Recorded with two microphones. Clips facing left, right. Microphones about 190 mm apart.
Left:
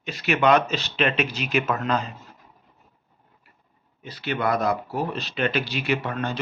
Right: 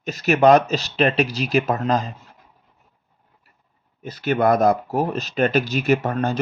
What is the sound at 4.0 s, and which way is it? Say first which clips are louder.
Speech: right 7 dB; 45° right (ahead or behind).